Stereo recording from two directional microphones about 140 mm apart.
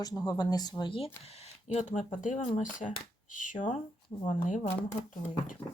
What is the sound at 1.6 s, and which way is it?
Speech, 55° left (ahead or behind).